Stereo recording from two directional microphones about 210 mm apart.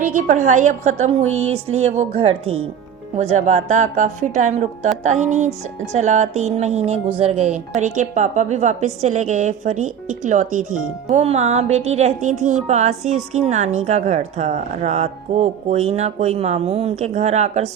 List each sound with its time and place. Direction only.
0.0 s a woman's voice: 35° right (ahead or behind)